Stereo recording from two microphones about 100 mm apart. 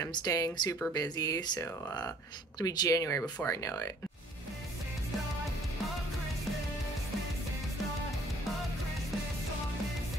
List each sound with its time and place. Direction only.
0.0 s speech: 40° left (ahead or behind)